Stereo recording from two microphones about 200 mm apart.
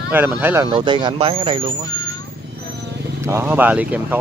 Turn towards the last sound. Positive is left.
turn(degrees=-10)  # may be behind; listen again after turning